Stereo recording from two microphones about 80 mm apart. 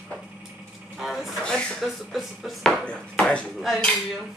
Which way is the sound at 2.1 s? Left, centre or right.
Centre.